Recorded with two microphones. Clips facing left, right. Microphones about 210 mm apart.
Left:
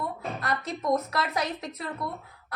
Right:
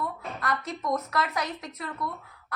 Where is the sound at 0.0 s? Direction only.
30° left (ahead or behind).